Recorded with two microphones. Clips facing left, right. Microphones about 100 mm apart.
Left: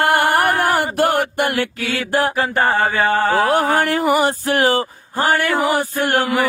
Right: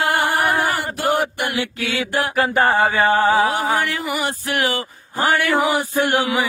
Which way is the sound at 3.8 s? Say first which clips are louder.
Left 7 dB; 45° left (ahead or behind).